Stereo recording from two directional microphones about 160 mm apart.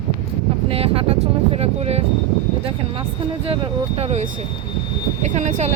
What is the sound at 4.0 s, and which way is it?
Speech, 45° right (ahead or behind).